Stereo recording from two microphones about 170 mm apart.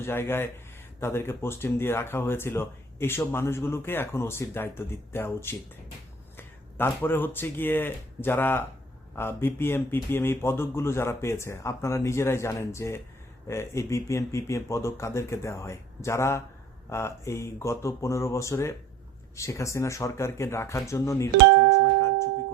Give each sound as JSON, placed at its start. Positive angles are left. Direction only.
{"t": 0.0, "sound": "speech", "side_deg": 15}